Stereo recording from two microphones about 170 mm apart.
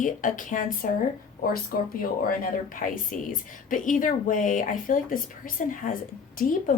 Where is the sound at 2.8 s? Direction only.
55° left (ahead or behind).